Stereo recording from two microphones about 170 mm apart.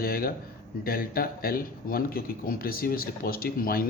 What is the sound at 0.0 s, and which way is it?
Speech, 60° left (ahead or behind).